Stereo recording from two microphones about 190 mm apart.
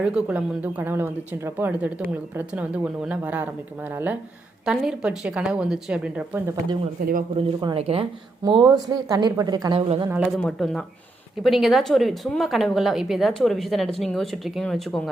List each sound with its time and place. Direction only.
0.0 s speech: 5° right (ahead or behind)
7.0 s speech: 45° right (ahead or behind)
7.3 s speech: 25° right (ahead or behind); by 10.2 s 10° right (ahead or behind)
10.2 s speech: centre (ahead or behind)